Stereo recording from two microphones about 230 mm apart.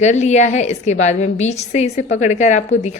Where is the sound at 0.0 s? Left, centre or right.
Left.